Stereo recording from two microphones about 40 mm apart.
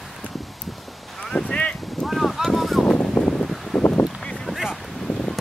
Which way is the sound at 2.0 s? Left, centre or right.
Centre.